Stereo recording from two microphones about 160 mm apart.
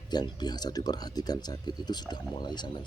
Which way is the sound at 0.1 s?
25° left (ahead or behind).